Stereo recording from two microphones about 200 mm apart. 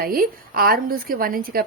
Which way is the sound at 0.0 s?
45° right (ahead or behind).